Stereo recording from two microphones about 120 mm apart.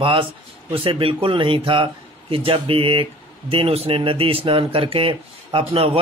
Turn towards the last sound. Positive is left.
turn(degrees=-50)  # may be behind; listen again after turning